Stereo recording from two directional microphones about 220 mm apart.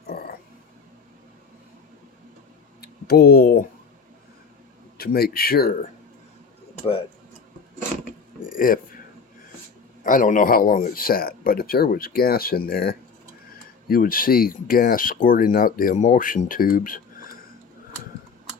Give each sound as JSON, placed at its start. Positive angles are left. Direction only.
{"t": 0.1, "sound": "a sound", "side_deg": 45}
{"t": 2.8, "sound": "speech", "side_deg": 45}
{"t": 4.9, "sound": "speech", "side_deg": 45}
{"t": 8.5, "sound": "speech", "side_deg": 40}
{"t": 10.0, "sound": "speech", "side_deg": 35}